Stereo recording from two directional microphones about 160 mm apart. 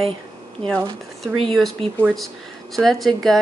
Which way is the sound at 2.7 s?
Centre (ahead or behind).